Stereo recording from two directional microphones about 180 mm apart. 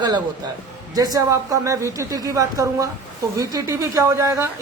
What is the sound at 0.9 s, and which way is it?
Speech, 20° right (ahead or behind).